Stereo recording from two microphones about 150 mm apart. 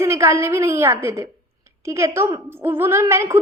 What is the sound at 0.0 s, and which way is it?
A woman's voice, 15° right (ahead or behind).